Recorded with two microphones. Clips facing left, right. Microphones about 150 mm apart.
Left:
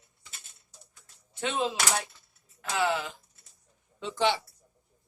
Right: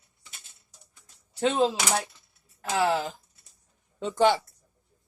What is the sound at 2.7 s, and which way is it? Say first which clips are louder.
Speech: right 4 dB; 35° right (ahead or behind).